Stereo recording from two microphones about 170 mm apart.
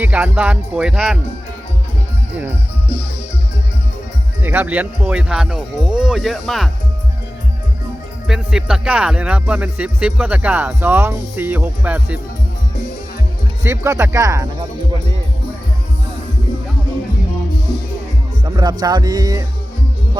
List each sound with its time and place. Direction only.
0.0 s speech: 10° right (ahead or behind)
4.4 s speech: 10° right (ahead or behind)
8.3 s speech: 5° right (ahead or behind)
13.7 s speech: 15° right (ahead or behind)
18.4 s music: 20° right (ahead or behind)